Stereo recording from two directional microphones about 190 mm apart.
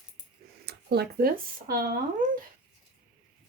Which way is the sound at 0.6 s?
55° right (ahead or behind).